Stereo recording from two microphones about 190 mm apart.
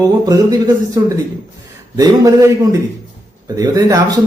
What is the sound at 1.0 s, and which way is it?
A man's voice, 15° right (ahead or behind).